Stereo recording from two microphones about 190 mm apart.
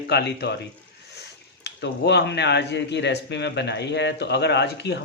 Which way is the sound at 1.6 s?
65° left (ahead or behind).